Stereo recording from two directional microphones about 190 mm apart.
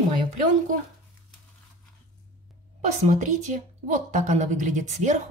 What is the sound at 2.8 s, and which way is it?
A woman's voice, 40° right (ahead or behind).